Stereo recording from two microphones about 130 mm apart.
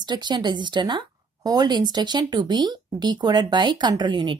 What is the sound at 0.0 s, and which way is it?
Speech, 35° right (ahead or behind).